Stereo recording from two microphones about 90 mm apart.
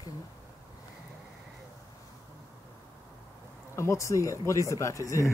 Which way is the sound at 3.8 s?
35° left (ahead or behind).